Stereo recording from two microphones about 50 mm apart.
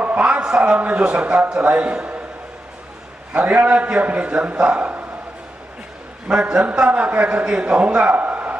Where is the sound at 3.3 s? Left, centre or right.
Right.